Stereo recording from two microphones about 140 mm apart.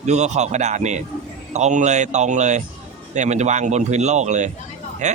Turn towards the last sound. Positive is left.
turn(degrees=-55)  # may be behind; listen again after turning